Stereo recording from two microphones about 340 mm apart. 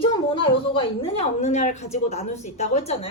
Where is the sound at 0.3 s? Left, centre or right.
Centre.